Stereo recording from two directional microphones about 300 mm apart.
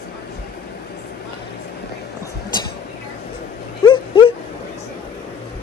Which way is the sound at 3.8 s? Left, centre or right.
Centre.